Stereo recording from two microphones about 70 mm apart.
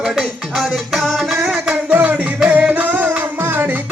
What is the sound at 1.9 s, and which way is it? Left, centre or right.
Music, right.